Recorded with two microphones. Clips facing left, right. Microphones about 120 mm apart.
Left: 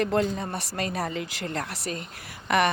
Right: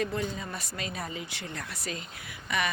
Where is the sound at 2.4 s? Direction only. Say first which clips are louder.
Left 8 dB; 55° left (ahead or behind).